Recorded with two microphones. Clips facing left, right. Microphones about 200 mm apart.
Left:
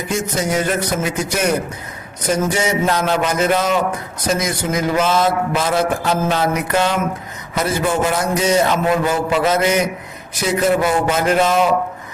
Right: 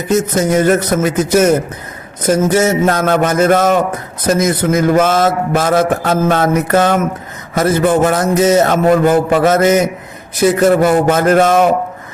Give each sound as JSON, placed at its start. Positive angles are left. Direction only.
{"t": 0.1, "sound": "mantra", "side_deg": -50}